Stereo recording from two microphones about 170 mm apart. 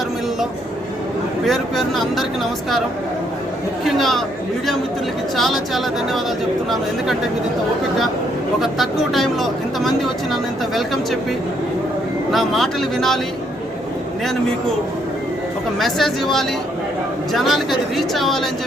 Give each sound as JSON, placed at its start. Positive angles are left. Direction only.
{"t": 1.5, "sound": "speech", "side_deg": 0}
{"t": 3.8, "sound": "chatter", "side_deg": 0}
{"t": 5.4, "sound": "speech", "side_deg": 0}
{"t": 8.6, "sound": "speech", "side_deg": 0}
{"t": 12.3, "sound": "speech", "side_deg": 0}
{"t": 15.8, "sound": "speech", "side_deg": 0}